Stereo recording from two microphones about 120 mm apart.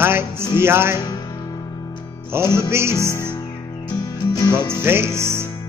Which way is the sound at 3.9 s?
35° left (ahead or behind).